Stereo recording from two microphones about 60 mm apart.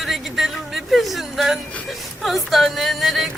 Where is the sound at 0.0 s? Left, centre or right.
Centre.